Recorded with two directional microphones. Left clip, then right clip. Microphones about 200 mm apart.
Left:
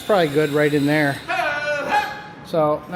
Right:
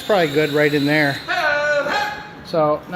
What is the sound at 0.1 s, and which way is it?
Speech, 5° left (ahead or behind).